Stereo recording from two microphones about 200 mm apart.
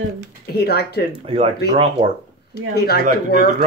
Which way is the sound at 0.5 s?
55° left (ahead or behind).